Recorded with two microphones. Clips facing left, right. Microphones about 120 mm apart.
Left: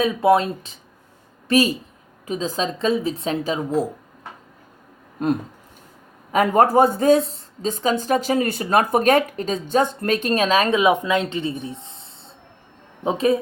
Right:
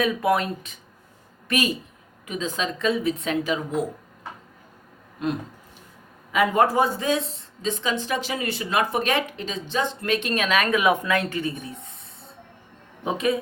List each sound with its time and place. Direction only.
0.0 s a woman's voice: 25° left (ahead or behind)
5.2 s speech: 45° left (ahead or behind)